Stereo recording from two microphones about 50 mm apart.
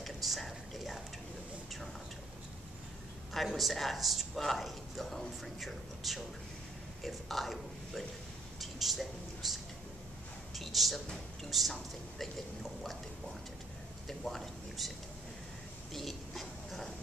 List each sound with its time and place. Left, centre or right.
0.0 s a sound: centre
3.3 s a man's voice: centre
8.5 s a sound: centre
10.5 s a man's voice: centre
14.0 s a man's voice: centre
15.9 s speech: centre